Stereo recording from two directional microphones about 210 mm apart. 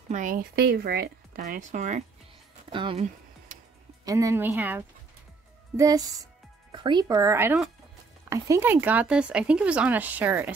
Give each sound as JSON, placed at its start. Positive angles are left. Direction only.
{"t": 0.1, "sound": "speech", "side_deg": -40}